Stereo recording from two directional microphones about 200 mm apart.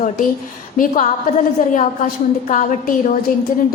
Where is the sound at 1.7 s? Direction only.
40° left (ahead or behind).